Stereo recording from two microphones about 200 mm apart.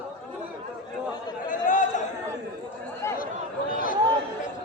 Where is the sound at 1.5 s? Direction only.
40° left (ahead or behind).